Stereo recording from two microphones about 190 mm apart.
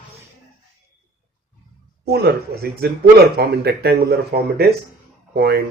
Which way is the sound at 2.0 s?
55° right (ahead or behind).